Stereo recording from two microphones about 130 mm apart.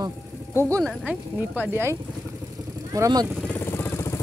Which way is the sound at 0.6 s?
25° right (ahead or behind).